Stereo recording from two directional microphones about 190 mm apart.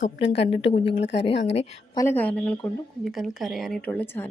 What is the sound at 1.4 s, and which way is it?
Speech, 35° left (ahead or behind).